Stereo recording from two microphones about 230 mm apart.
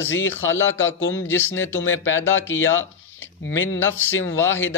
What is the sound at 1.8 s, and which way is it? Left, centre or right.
Speech, left.